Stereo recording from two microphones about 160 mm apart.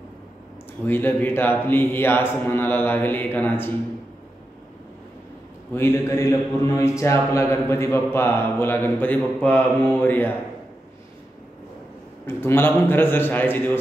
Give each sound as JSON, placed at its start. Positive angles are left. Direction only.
{"t": 0.8, "sound": "a man's voice", "side_deg": 10}
{"t": 5.7, "sound": "a man's voice", "side_deg": 15}
{"t": 12.3, "sound": "a man's voice", "side_deg": 15}